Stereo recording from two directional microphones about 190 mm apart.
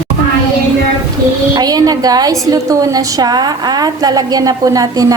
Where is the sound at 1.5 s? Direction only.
20° right (ahead or behind).